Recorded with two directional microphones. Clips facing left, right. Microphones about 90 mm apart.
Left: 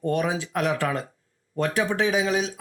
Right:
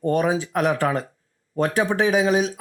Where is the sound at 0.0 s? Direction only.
40° right (ahead or behind).